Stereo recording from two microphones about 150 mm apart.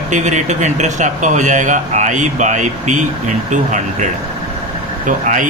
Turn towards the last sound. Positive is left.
turn(degrees=-60)  # may be behind; listen again after turning